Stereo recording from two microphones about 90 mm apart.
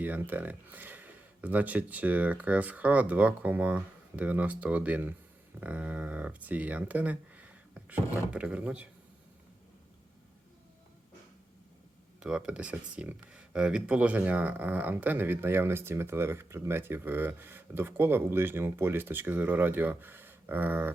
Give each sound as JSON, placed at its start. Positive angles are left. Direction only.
{"t": 0.0, "sound": "speech", "side_deg": -20}
{"t": 12.2, "sound": "speech", "side_deg": -10}